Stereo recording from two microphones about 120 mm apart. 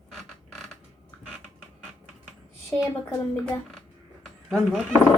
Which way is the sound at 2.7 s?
20° left (ahead or behind).